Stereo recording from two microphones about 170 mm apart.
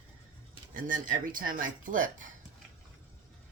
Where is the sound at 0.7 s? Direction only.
50° right (ahead or behind).